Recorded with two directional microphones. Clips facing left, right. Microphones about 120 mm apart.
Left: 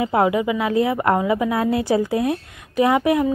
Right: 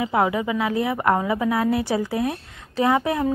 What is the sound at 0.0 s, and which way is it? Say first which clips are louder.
Speech: left 3 dB; 25° left (ahead or behind).